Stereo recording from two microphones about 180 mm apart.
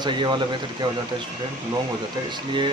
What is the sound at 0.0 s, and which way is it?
Speech, 25° right (ahead or behind).